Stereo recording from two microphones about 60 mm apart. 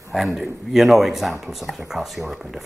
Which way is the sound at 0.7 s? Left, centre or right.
Centre.